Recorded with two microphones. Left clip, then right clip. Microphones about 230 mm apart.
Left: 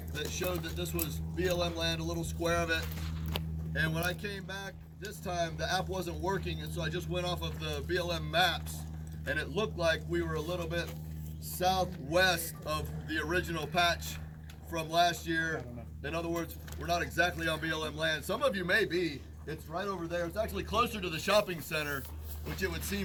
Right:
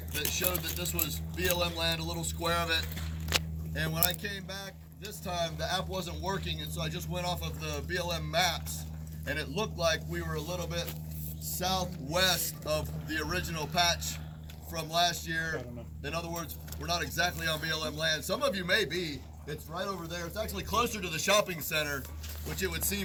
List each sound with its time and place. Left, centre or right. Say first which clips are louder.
0.1 s speech: right 2 dB; centre
1.5 s a sound: right 2 dB; centre
2.4 s speech: right 1 dB; centre